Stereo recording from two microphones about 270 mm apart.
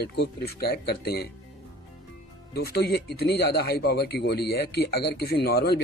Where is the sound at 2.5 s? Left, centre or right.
Left.